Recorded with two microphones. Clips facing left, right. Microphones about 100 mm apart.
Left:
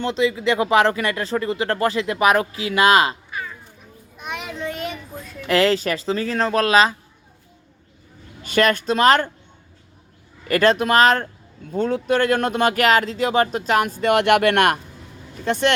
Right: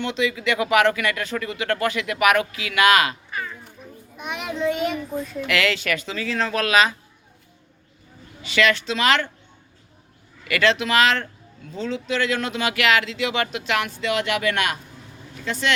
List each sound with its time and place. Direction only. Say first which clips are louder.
0.0 s speech: left 3 dB; 35° left (ahead or behind)
3.2 s cat: even; 5° left (ahead or behind)
4.2 s children playing: right 3 dB; centre (ahead or behind)
5.5 s speech: left 6 dB; 35° left (ahead or behind)
8.4 s speech: left 2 dB; 45° left (ahead or behind)
10.5 s speech: left 4 dB; 45° left (ahead or behind)
11.7 s speech: left 6 dB; 50° left (ahead or behind)